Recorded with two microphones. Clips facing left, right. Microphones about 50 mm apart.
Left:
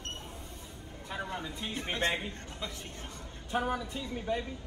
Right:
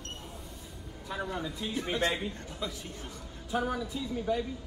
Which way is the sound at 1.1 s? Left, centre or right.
Left.